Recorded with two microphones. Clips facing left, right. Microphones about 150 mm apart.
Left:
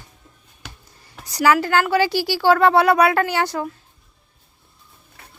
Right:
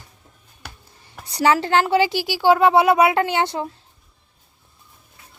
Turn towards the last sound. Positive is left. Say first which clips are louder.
# left 3 dB
turn(degrees=70)  # may be behind; listen again after turning